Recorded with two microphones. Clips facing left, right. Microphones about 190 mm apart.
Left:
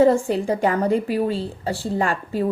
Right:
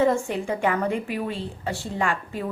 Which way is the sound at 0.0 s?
35° left (ahead or behind).